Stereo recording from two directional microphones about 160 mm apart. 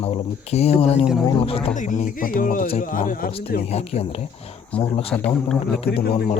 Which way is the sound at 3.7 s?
40° left (ahead or behind).